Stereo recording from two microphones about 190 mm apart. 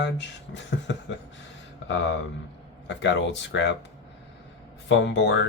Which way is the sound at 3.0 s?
65° left (ahead or behind).